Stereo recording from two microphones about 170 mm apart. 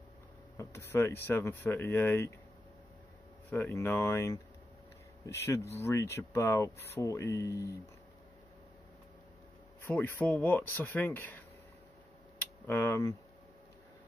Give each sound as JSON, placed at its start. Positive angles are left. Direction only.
{"t": 0.6, "sound": "speech", "side_deg": 15}
{"t": 3.4, "sound": "speech", "side_deg": 15}
{"t": 9.8, "sound": "speech", "side_deg": 10}
{"t": 12.6, "sound": "speech", "side_deg": 15}